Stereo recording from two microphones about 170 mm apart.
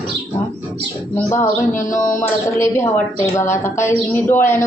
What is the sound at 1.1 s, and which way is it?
Speech, 15° left (ahead or behind).